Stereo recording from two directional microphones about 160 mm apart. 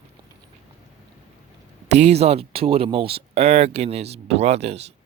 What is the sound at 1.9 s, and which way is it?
Speech, 45° right (ahead or behind).